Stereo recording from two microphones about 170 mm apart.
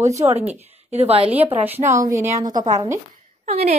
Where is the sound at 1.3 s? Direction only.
10° right (ahead or behind).